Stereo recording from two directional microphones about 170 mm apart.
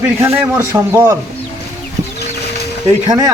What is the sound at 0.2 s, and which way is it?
A man's voice, 15° right (ahead or behind).